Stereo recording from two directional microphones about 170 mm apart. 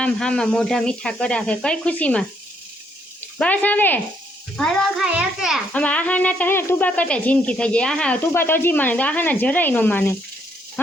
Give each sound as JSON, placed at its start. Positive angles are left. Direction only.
{"t": 0.0, "sound": "speech", "side_deg": 5}
{"t": 5.7, "sound": "speech", "side_deg": 10}